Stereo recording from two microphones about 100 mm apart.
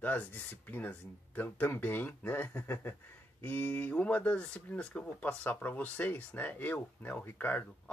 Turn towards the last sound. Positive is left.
turn(degrees=15)  # may be behind; listen again after turning